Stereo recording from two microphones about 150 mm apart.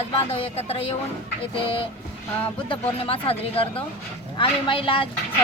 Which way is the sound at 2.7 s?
35° left (ahead or behind).